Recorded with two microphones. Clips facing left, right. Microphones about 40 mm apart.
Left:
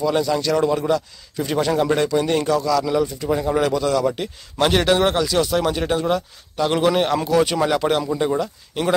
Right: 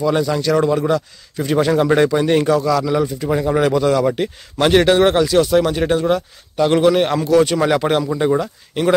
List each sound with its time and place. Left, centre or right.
0.0 s speech: centre
7.6 s speech: centre